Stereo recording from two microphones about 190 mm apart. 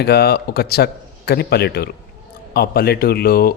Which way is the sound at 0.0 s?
55° left (ahead or behind).